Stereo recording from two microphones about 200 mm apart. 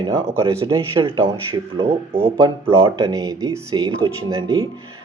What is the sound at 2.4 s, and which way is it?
Speech, 25° right (ahead or behind).